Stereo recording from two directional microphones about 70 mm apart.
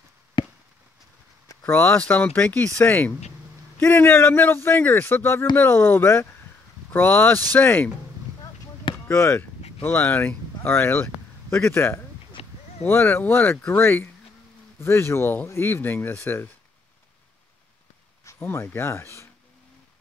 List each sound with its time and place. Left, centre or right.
1.7 s speech: left
2.0 s speech: centre
9.1 s speech: left
18.2 s a sound: left
18.7 s speech: left